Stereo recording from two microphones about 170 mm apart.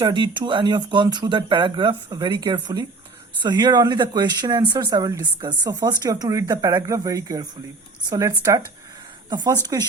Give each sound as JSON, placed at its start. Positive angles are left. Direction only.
{"t": 0.0, "sound": "speech", "side_deg": -25}